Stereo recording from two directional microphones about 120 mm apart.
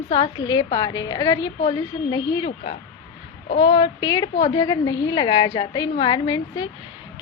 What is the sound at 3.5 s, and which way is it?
A woman's voice, 45° left (ahead or behind).